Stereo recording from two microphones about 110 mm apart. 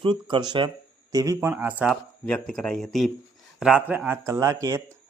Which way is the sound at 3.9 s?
20° right (ahead or behind).